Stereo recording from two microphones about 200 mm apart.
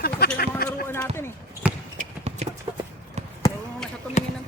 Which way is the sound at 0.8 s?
10° left (ahead or behind).